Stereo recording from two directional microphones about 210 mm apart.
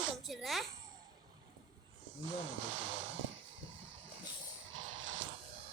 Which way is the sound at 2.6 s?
65° right (ahead or behind).